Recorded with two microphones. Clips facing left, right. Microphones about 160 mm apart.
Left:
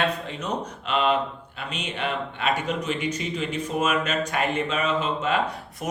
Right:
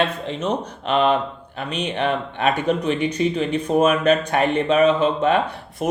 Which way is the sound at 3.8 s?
55° right (ahead or behind).